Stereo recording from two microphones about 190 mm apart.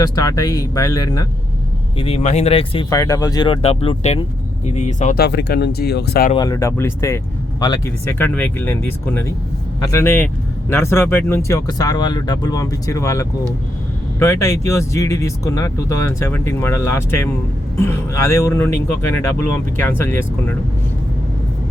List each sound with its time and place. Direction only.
0.0 s speech: 20° left (ahead or behind)
2.0 s speech: 30° left (ahead or behind)
2.9 s speech: 15° left (ahead or behind); by 5.2 s 40° left (ahead or behind)
5.2 s speech: 60° left (ahead or behind)
6.3 s speech: 20° left (ahead or behind)